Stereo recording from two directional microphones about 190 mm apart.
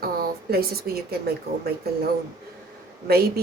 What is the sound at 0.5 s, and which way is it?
Speech, 55° right (ahead or behind).